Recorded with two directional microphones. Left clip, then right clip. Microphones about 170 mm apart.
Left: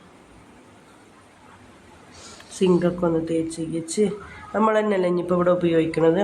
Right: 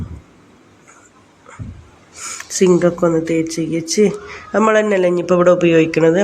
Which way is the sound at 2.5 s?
20° right (ahead or behind).